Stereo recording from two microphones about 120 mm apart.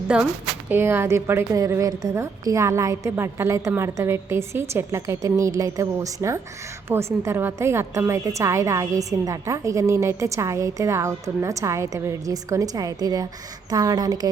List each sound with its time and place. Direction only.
0.7 s a woman's voice: 20° right (ahead or behind)